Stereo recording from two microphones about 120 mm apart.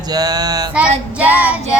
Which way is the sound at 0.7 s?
10° right (ahead or behind).